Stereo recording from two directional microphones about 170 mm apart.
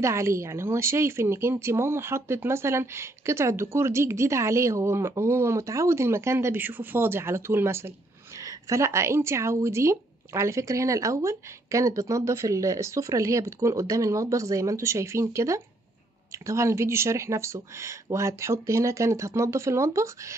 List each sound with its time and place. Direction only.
0.0 s speech: 15° right (ahead or behind)